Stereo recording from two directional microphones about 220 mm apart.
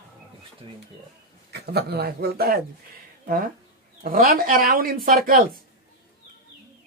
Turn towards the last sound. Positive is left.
turn(degrees=-40)  # may be behind; listen again after turning